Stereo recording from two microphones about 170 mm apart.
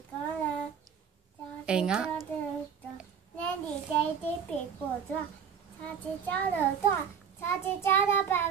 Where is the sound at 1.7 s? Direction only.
5° right (ahead or behind).